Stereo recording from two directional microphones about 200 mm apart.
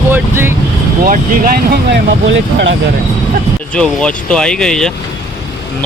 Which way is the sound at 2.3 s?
65° right (ahead or behind).